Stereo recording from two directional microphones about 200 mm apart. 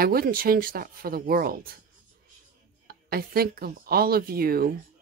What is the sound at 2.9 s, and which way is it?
Speech, 50° right (ahead or behind).